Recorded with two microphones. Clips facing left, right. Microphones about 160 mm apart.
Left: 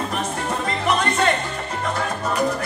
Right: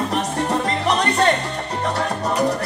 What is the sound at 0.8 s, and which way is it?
Music, 35° right (ahead or behind).